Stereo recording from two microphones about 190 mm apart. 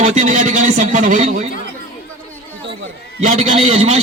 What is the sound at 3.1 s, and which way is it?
Speech, 40° right (ahead or behind).